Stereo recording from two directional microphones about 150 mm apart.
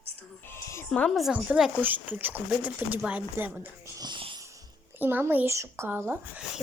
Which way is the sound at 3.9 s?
30° right (ahead or behind).